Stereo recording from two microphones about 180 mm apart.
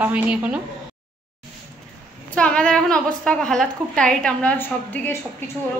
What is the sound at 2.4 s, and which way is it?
A woman's voice, 5° left (ahead or behind).